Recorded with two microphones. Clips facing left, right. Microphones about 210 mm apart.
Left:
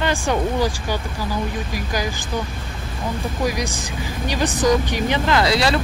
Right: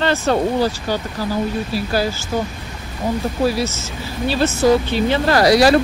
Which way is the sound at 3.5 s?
15° left (ahead or behind).